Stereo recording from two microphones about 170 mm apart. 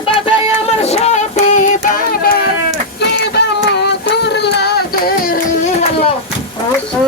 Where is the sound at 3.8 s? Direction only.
80° left.